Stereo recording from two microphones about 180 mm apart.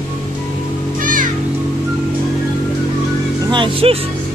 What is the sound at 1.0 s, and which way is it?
Music, 50° right (ahead or behind).